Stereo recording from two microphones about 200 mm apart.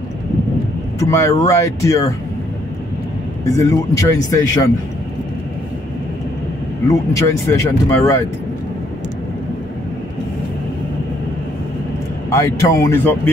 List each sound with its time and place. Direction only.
0.9 s speech: 15° left (ahead or behind)
3.4 s speech: 15° left (ahead or behind)
6.9 s speech: 15° left (ahead or behind)
12.3 s speech: 15° left (ahead or behind)